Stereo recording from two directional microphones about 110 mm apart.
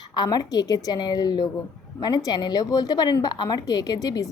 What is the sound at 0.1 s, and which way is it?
A woman's voice, 40° left (ahead or behind).